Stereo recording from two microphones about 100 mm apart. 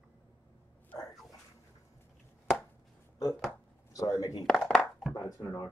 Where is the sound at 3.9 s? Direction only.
35° left (ahead or behind).